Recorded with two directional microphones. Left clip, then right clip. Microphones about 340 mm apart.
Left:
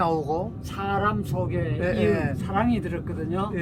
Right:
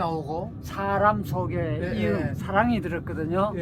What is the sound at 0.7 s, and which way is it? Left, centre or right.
Speech, centre.